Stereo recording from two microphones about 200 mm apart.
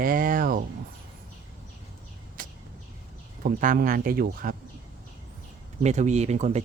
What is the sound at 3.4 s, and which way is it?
Speech, 45° right (ahead or behind).